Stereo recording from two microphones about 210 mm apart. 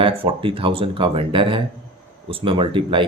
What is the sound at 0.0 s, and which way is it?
Speech, 25° right (ahead or behind).